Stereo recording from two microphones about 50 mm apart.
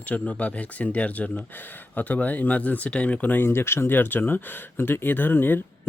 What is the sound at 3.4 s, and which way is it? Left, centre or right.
Speech, left.